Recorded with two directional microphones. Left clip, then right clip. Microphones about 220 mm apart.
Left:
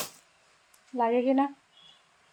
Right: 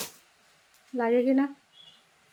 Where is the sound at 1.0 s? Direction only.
5° right (ahead or behind).